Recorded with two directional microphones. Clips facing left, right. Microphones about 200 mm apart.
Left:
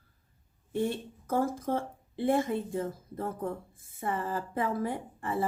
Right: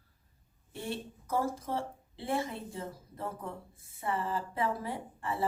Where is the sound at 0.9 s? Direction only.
50° left (ahead or behind).